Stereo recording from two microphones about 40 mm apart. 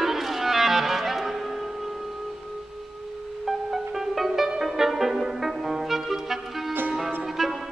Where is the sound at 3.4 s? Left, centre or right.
Centre.